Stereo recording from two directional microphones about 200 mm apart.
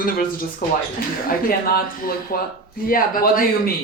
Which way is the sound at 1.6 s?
50° left (ahead or behind).